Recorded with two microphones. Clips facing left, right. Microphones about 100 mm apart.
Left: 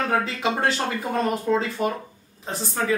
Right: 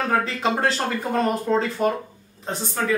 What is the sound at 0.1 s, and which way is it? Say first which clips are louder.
A woman's voice: right 1 dB; 5° left (ahead or behind).